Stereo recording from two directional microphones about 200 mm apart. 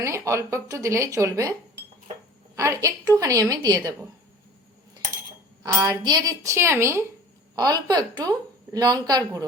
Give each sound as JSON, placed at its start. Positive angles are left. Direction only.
{"t": 0.0, "sound": "speech", "side_deg": -15}
{"t": 2.6, "sound": "speech", "side_deg": -15}
{"t": 5.6, "sound": "a woman's voice", "side_deg": -20}